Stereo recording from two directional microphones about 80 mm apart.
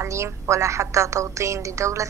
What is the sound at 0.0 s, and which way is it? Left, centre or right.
A woman's voice, right.